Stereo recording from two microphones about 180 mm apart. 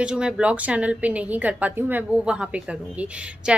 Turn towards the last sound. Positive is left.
turn(degrees=-5)  # may be behind; listen again after turning